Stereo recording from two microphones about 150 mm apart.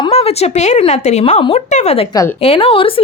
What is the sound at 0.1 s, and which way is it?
Speech, 45° left (ahead or behind).